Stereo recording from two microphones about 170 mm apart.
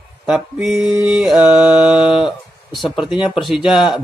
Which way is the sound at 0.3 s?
5° right (ahead or behind).